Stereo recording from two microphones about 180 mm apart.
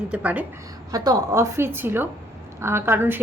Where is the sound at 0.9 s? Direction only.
20° right (ahead or behind).